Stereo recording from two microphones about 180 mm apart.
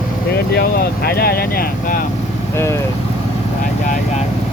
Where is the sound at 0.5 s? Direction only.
60° left (ahead or behind).